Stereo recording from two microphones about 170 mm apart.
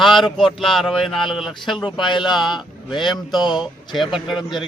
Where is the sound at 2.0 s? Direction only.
25° left (ahead or behind).